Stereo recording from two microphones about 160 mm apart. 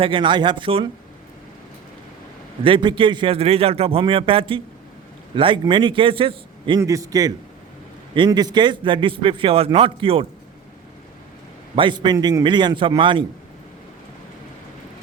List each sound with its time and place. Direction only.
0.0 s a man's voice: 30° right (ahead or behind)
2.6 s a man's voice: 30° right (ahead or behind)
6.7 s a man's voice: 20° right (ahead or behind)
11.8 s a man's voice: 30° right (ahead or behind)